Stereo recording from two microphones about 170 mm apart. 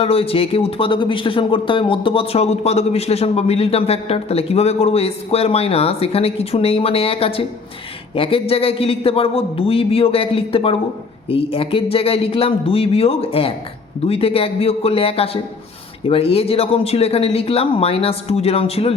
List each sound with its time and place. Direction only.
0.0 s speech: 35° left (ahead or behind)